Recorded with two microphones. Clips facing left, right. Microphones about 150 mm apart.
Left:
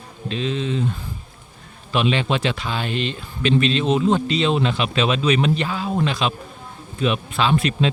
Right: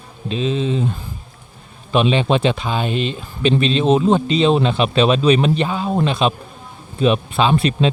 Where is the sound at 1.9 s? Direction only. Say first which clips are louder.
Right 4 dB; 20° right (ahead or behind).